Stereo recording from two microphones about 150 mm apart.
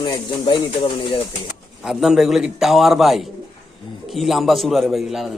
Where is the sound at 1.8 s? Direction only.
5° right (ahead or behind).